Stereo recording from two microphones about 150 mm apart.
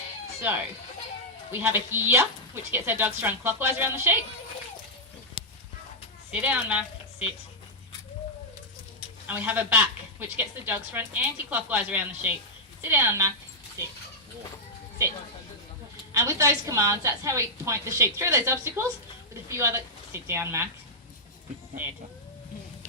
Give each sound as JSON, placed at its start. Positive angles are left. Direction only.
{"t": 0.4, "sound": "speech", "side_deg": -10}
{"t": 6.4, "sound": "speech", "side_deg": -10}
{"t": 9.2, "sound": "speech", "side_deg": -10}
{"t": 16.1, "sound": "a woman's voice", "side_deg": -20}